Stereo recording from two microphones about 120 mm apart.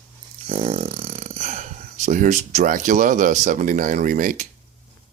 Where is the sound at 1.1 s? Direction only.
80° right.